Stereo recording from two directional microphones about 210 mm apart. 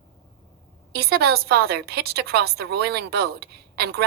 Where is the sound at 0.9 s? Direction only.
50° right (ahead or behind).